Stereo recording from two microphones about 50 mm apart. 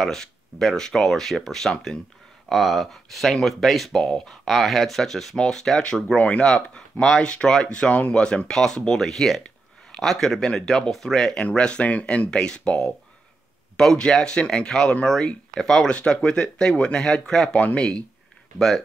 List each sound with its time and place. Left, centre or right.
0.0 s speech: centre
11.4 s speech: centre
15.9 s speech: centre
17.5 s speech: left